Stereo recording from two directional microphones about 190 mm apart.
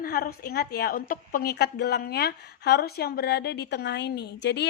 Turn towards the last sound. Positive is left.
turn(degrees=65)  # may be behind; listen again after turning